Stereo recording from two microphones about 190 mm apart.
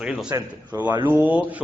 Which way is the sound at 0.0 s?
5° right (ahead or behind).